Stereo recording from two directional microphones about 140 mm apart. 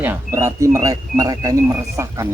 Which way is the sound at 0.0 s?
20° right (ahead or behind).